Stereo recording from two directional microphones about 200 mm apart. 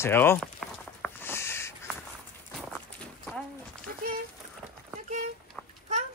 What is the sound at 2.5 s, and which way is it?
Horse, centre (ahead or behind).